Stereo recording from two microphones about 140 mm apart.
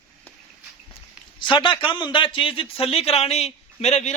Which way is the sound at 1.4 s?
35° left (ahead or behind).